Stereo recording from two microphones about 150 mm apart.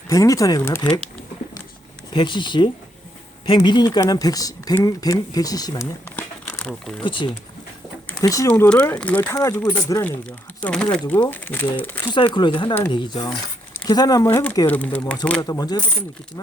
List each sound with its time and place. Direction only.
0.1 s speech: 20° left (ahead or behind)
2.1 s speech: 30° left (ahead or behind)
6.1 s crumpling: 10° left (ahead or behind)
7.0 s speech: 35° left (ahead or behind)
8.2 s speech: 20° left (ahead or behind)
8.4 s speech: 10° left (ahead or behind)
10.6 s speech: 5° left (ahead or behind)
12.1 s speech: 30° left (ahead or behind)
14.7 s speech: 10° left (ahead or behind)
15.4 s speech: 25° left (ahead or behind)